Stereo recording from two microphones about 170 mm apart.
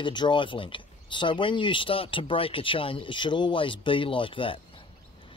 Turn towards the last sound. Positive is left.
turn(degrees=30)  # may be behind; listen again after turning